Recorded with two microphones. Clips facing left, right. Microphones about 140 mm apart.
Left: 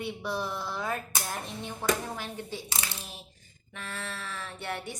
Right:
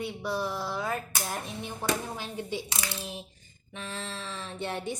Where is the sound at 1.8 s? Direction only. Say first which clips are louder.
Left 2 dB; 15° right (ahead or behind).